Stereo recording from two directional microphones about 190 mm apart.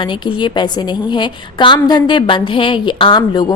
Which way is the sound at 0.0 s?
25° left (ahead or behind).